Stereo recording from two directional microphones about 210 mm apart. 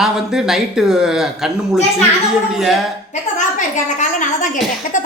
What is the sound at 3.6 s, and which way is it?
Speech, 35° left (ahead or behind).